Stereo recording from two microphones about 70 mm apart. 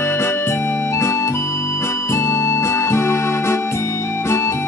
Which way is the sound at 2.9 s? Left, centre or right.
Left.